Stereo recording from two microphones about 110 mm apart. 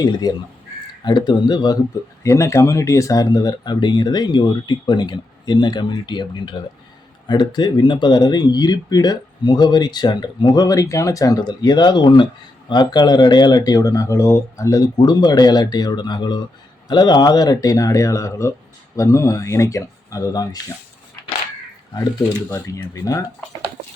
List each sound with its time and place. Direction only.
0.0 s speech: 35° left (ahead or behind)
2.2 s speech: 25° left (ahead or behind)
22.4 s speech: 25° left (ahead or behind)